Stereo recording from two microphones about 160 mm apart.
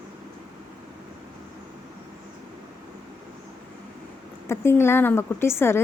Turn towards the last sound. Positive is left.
turn(degrees=15)  # may be behind; listen again after turning